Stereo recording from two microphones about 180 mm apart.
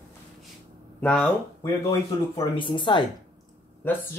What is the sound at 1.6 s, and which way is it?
Speech, 20° left (ahead or behind).